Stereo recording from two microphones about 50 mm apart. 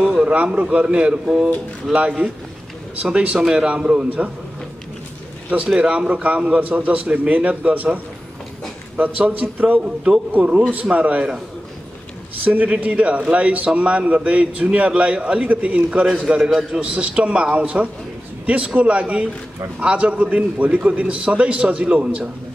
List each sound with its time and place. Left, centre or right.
0.1 s a man's voice: right
1.9 s speech: centre
3.0 s a man's voice: right
5.8 s a man's voice: right
9.8 s a man's voice: centre
12.4 s a man's voice: right